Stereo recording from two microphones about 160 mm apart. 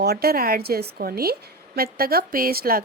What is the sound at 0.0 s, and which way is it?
A woman's voice, 80° right.